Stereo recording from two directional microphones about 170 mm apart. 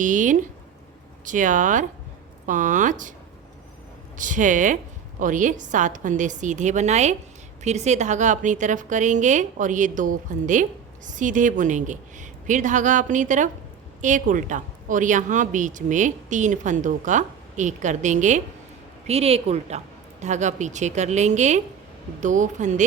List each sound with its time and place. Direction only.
0.0 s a woman's voice: 50° right (ahead or behind)
4.2 s a woman's voice: 50° right (ahead or behind)